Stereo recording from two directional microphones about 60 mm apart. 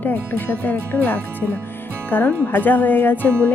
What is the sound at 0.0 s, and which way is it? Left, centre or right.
Speech, left.